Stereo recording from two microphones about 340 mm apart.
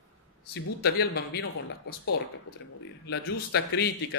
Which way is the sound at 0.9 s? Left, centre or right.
Left.